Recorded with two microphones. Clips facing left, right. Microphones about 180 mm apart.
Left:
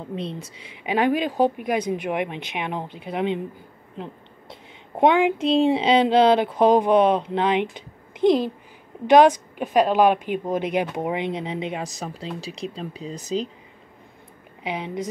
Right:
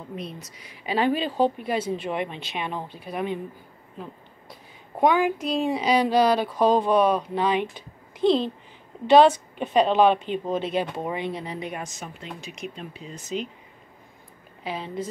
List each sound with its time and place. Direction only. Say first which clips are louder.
0.1 s a woman's voice: left 5 dB; 30° left (ahead or behind)
11.8 s speech: left 5 dB; 35° left (ahead or behind)
14.6 s a woman's voice: left 2 dB; 20° left (ahead or behind)